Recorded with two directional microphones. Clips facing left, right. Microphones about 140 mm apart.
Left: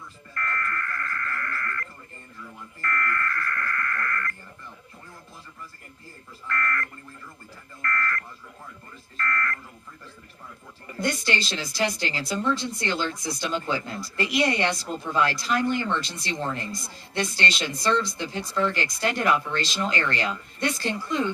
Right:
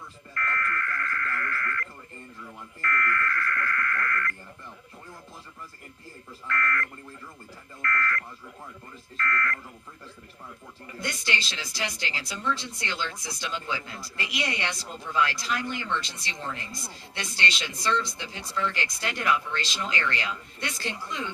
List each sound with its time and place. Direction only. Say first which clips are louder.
0.3 s music: even; 35° left (ahead or behind)
2.8 s speech: even; 35° left (ahead or behind)
6.5 s speech: even; 35° left (ahead or behind)
7.8 s alarm: even; 40° left (ahead or behind)
9.1 s speech: even; 40° left (ahead or behind)
11.0 s speech: left 6 dB; 40° left (ahead or behind)